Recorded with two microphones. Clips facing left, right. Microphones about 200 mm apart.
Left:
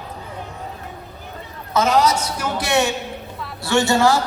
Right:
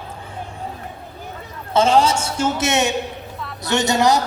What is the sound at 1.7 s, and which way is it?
A woman's voice, 30° right (ahead or behind).